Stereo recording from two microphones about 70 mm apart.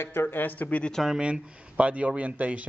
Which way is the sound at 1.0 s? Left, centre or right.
Centre.